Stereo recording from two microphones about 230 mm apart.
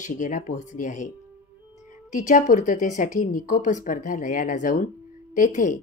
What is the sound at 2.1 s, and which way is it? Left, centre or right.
Speech, left.